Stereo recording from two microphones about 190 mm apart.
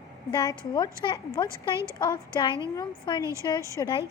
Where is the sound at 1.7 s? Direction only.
15° right (ahead or behind).